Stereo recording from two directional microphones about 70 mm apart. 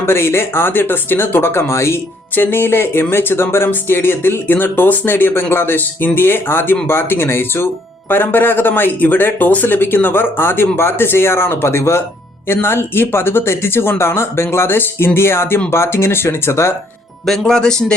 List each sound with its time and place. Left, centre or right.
0.0 s speech: left
17.2 s speech: centre